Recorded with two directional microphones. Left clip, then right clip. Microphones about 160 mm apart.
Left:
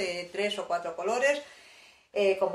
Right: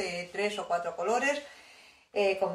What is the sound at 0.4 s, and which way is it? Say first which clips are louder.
Speech: even; 45° left (ahead or behind).